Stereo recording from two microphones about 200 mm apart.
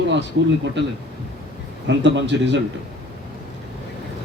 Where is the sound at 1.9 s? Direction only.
65° right (ahead or behind).